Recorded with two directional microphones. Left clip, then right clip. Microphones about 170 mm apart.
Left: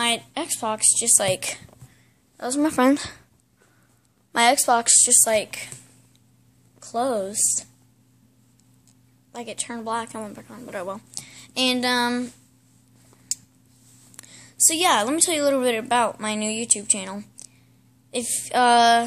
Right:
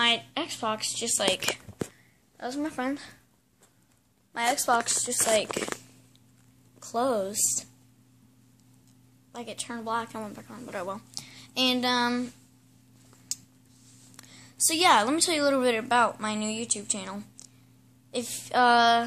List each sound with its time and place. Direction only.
0.0 s a woman's voice: 15° left (ahead or behind)
1.1 s a woman's voice: 25° left (ahead or behind)
2.3 s speech: 45° left (ahead or behind)
4.3 s speech: 50° left (ahead or behind)
4.6 s a woman's voice: 20° left (ahead or behind)
5.3 s speech: centre (ahead or behind)
6.8 s speech: centre (ahead or behind)
9.3 s a woman's voice: 20° left (ahead or behind)
13.3 s a sound: 15° left (ahead or behind)
14.8 s a woman's voice: 5° left (ahead or behind)